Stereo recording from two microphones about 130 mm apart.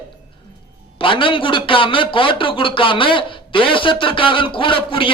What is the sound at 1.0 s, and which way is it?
A man's voice, 40° left (ahead or behind).